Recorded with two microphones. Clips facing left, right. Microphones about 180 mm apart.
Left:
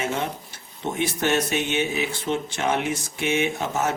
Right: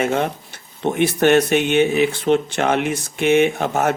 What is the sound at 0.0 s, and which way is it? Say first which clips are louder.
Speech: right 7 dB; 60° right (ahead or behind).